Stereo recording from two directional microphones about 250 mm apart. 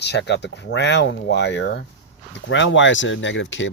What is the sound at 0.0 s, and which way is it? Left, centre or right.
Speech, left.